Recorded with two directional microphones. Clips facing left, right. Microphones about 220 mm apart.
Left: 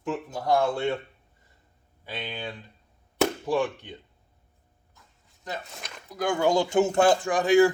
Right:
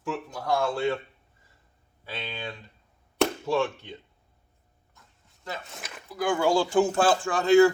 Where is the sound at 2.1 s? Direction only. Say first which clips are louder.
Left 1 dB; 15° left (ahead or behind).